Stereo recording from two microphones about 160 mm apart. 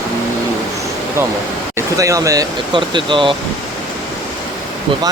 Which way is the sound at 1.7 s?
20° right (ahead or behind).